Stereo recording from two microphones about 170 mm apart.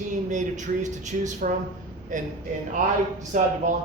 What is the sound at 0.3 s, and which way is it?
Speech, 45° right (ahead or behind).